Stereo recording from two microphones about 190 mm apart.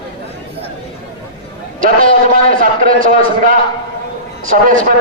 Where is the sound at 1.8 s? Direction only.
45° right (ahead or behind).